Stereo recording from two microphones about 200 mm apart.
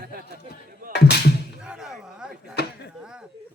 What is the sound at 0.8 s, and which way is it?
Music, 45° right (ahead or behind).